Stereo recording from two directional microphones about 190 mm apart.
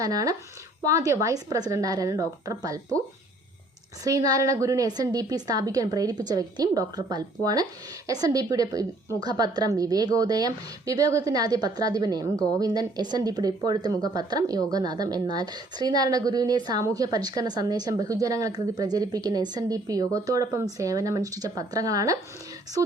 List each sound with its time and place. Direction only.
0.0 s a woman's voice: 20° right (ahead or behind)
4.0 s a woman's voice: 20° right (ahead or behind)